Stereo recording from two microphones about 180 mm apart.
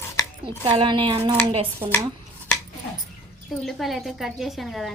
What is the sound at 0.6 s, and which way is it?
Speech, 25° right (ahead or behind).